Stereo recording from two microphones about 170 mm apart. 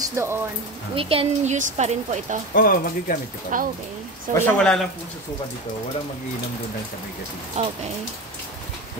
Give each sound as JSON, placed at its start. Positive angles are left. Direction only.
{"t": 0.1, "sound": "speech", "side_deg": -15}
{"t": 0.9, "sound": "speech", "side_deg": -35}
{"t": 2.5, "sound": "speech", "side_deg": 60}
{"t": 3.5, "sound": "speech", "side_deg": -50}
{"t": 4.3, "sound": "speech", "side_deg": 10}
{"t": 7.5, "sound": "speech", "side_deg": -40}